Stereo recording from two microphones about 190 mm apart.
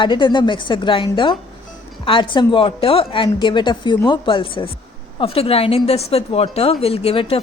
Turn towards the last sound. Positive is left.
turn(degrees=30)  # may be behind; listen again after turning